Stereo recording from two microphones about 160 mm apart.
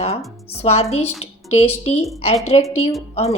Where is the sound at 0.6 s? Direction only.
40° left (ahead or behind).